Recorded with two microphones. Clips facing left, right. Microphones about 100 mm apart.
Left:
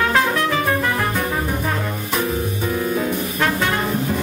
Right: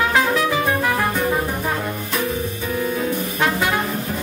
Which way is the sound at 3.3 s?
10° right (ahead or behind).